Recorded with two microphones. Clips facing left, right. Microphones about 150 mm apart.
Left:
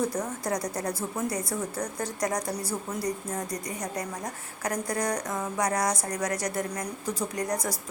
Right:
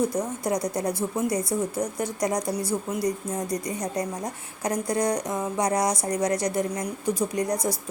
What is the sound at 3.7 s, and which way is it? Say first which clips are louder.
A woman's voice: right 5 dB; 20° right (ahead or behind).